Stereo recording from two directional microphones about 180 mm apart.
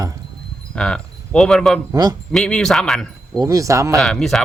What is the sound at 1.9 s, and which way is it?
Speech, 20° right (ahead or behind).